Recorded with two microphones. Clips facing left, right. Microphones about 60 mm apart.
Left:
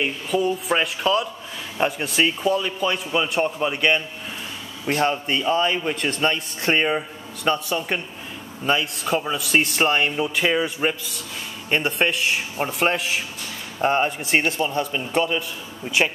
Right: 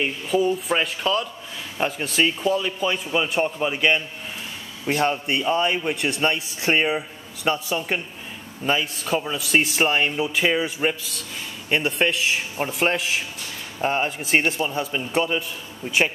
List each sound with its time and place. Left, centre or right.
0.0 s a man's voice: centre
9.0 s a man's voice: centre